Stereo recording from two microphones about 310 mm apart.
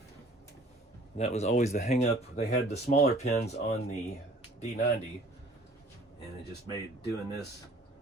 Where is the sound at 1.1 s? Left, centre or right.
Left.